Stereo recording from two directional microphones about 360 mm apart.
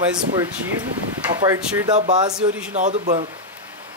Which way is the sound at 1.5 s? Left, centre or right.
Centre.